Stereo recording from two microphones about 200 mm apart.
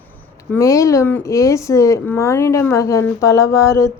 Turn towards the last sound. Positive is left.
turn(degrees=15)  # may be behind; listen again after turning